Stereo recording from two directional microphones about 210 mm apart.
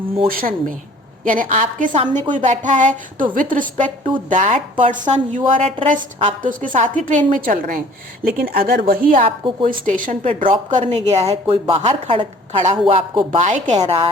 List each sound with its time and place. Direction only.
0.3 s speech: 40° right (ahead or behind)
1.9 s speech: 25° right (ahead or behind); by 9.0 s 45° right (ahead or behind)
9.2 s speech: 25° right (ahead or behind)
9.8 s speech: 40° right (ahead or behind)